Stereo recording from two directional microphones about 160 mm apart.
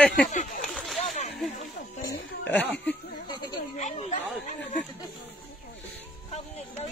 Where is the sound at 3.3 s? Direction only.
30° left (ahead or behind).